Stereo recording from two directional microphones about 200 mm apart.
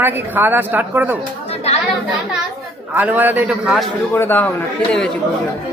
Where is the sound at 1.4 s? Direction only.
30° left (ahead or behind).